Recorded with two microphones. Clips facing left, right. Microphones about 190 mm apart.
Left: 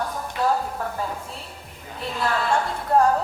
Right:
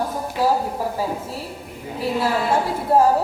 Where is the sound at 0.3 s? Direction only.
10° right (ahead or behind).